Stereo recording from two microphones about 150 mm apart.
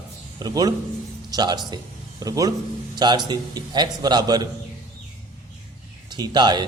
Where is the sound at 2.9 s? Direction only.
30° right (ahead or behind).